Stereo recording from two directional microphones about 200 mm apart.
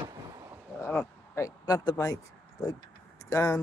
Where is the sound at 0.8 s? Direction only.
10° left (ahead or behind).